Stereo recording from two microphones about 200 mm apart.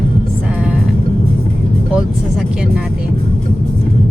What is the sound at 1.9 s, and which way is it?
Vehicle, 5° right (ahead or behind).